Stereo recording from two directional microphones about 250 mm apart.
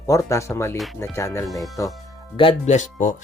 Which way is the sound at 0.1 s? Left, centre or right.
Centre.